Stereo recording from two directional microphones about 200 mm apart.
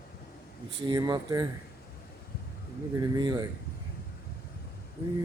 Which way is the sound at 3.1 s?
20° right (ahead or behind).